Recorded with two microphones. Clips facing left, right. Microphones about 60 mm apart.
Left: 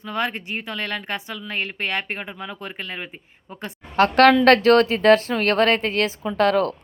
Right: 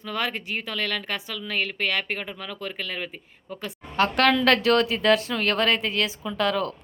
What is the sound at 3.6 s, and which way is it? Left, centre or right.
A woman's voice, left.